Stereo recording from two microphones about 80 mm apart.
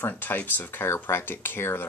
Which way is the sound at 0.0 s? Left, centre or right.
Left.